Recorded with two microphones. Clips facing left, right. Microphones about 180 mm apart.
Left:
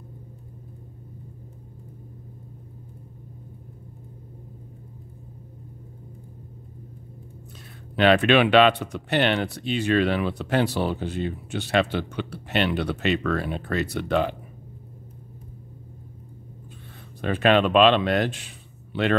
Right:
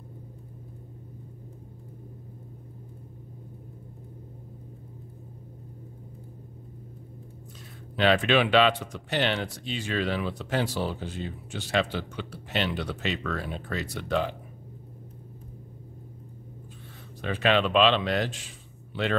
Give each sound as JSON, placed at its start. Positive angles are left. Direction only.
{"t": 7.9, "sound": "speech", "side_deg": 65}
{"t": 17.2, "sound": "a man's voice", "side_deg": 50}